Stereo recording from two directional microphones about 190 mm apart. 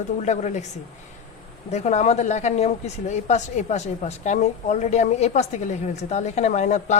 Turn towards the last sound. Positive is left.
turn(degrees=40)  # may be behind; listen again after turning